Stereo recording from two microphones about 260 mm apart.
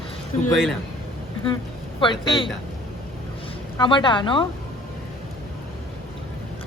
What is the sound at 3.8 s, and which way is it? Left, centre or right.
Speech, centre.